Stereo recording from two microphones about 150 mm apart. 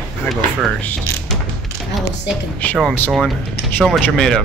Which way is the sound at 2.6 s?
10° left (ahead or behind).